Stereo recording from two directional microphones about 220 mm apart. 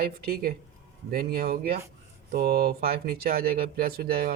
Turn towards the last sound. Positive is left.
turn(degrees=-40)  # may be behind; listen again after turning